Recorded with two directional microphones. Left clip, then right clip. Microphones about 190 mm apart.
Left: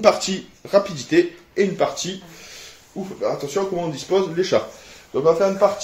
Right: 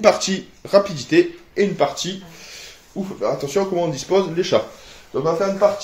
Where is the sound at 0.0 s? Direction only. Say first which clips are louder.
Right 1 dB; 5° right (ahead or behind).